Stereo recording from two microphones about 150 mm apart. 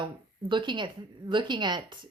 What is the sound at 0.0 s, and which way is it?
A woman's voice, 35° right (ahead or behind).